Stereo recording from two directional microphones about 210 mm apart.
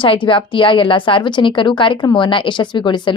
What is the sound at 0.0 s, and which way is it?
A woman's voice, 25° left (ahead or behind).